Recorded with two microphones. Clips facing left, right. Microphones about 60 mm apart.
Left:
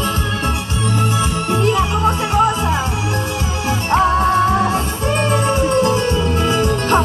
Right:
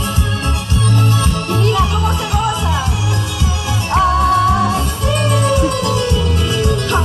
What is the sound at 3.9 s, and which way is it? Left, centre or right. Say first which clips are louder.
Music: right 1 dB; left.